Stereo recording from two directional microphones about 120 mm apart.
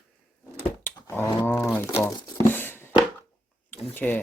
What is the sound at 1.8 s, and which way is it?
Speech, 25° left (ahead or behind).